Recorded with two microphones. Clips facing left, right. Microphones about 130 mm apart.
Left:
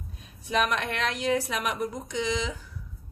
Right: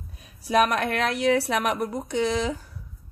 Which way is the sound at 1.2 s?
65° right (ahead or behind).